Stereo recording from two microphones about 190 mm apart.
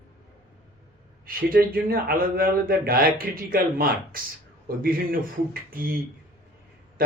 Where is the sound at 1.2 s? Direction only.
50° right (ahead or behind).